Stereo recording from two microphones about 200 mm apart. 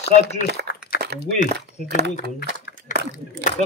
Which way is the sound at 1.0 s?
55° right (ahead or behind).